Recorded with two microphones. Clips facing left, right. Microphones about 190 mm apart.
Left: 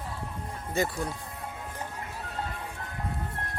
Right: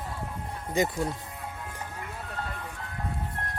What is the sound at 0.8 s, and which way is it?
Speech, 20° right (ahead or behind).